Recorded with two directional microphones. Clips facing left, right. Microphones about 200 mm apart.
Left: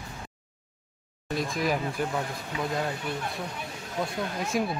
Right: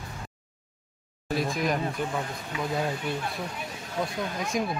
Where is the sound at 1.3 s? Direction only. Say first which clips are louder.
Right 1 dB; centre (ahead or behind).